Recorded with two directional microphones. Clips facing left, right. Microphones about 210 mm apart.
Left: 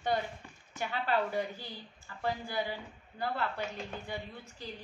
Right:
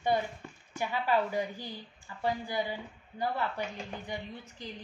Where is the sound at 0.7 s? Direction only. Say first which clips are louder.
Right 3 dB; 15° right (ahead or behind).